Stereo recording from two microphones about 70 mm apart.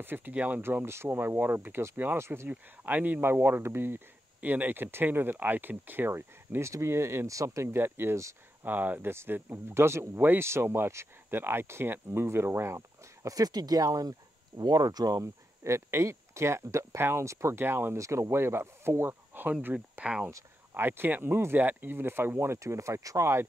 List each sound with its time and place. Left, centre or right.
0.0 s speech: right
0.3 s speech: centre
0.6 s speech: right
2.5 s speech: right
7.7 s speech: right
10.1 s speech: right
15.2 s speech: right
17.9 s speech: right; by 20.2 s centre
20.7 s speech: right